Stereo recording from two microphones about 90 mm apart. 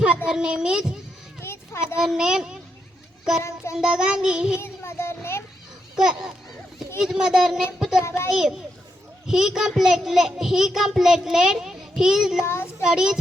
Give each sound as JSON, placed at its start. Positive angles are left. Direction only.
{"t": 0.3, "sound": "child singing", "side_deg": -10}
{"t": 1.4, "sound": "a sound", "side_deg": 30}
{"t": 2.0, "sound": "child singing", "side_deg": -5}
{"t": 3.8, "sound": "child singing", "side_deg": -10}
{"t": 4.6, "sound": "a sound", "side_deg": 30}
{"t": 6.0, "sound": "child singing", "side_deg": -5}
{"t": 7.0, "sound": "a child's voice", "side_deg": -5}
{"t": 12.5, "sound": "a child's voice", "side_deg": 30}
{"t": 12.8, "sound": "child singing", "side_deg": -5}